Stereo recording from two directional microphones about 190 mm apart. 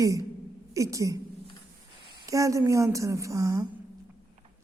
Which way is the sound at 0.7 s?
15° right (ahead or behind).